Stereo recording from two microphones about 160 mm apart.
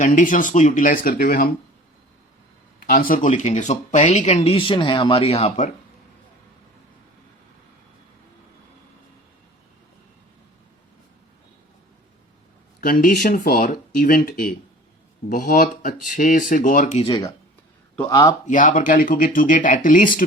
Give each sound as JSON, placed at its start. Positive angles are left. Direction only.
{"t": 0.0, "sound": "speech", "side_deg": 50}
{"t": 2.8, "sound": "speech", "side_deg": 60}
{"t": 12.8, "sound": "speech", "side_deg": 60}
{"t": 17.0, "sound": "speech", "side_deg": 30}
{"t": 17.9, "sound": "a man's voice", "side_deg": 15}
{"t": 18.4, "sound": "speech", "side_deg": 55}